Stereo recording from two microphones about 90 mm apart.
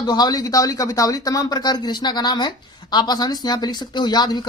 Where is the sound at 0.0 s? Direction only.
50° left (ahead or behind).